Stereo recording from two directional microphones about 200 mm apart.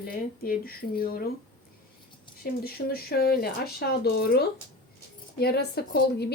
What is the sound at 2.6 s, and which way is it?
A woman's voice, 50° left (ahead or behind).